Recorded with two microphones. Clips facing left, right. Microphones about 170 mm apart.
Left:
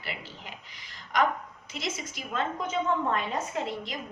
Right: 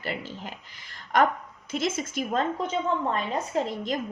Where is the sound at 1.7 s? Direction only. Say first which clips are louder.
Right 8 dB; 50° right (ahead or behind).